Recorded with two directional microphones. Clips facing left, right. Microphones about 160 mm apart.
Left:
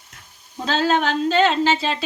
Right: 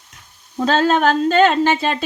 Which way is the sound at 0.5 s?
45° right (ahead or behind).